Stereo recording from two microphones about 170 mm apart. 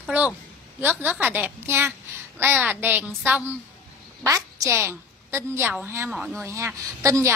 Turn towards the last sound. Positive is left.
turn(degrees=-20)  # may be behind; listen again after turning